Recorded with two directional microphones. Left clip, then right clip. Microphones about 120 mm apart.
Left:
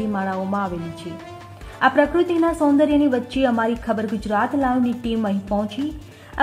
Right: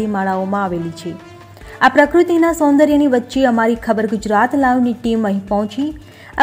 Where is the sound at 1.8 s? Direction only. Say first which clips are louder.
Right 6 dB; 30° right (ahead or behind).